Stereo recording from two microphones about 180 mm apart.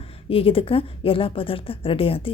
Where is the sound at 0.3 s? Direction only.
30° left (ahead or behind).